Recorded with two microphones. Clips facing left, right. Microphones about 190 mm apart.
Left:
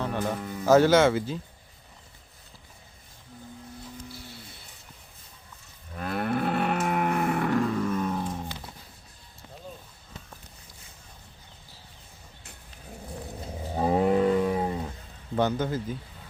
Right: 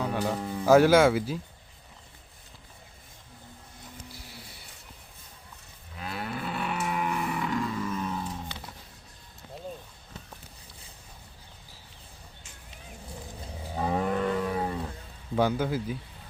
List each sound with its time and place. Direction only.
0.0 s music: 10° right (ahead or behind)
0.3 s speech: 30° right (ahead or behind)
0.6 s speech: 10° right (ahead or behind)
6.0 s livestock: 55° left (ahead or behind)
13.7 s a sound: 30° left (ahead or behind)
15.4 s speech: 10° right (ahead or behind)